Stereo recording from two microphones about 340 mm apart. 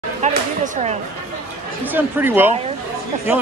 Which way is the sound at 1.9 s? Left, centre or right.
Centre.